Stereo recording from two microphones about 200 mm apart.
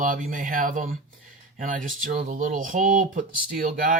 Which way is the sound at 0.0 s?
40° right (ahead or behind).